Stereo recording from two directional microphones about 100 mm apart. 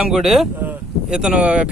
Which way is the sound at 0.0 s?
5° right (ahead or behind).